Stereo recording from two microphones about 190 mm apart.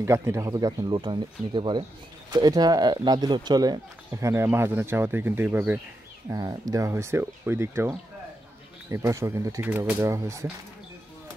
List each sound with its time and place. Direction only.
0.0 s speech: 15° right (ahead or behind)
8.9 s speech: 15° right (ahead or behind)